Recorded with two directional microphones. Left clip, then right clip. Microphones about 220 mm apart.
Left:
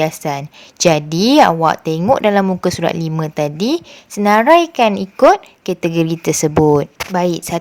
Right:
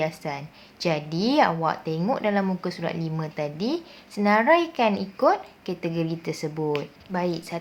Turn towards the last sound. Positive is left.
turn(degrees=45)  # may be behind; listen again after turning